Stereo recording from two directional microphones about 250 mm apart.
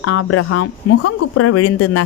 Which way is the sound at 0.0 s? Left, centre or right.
Left.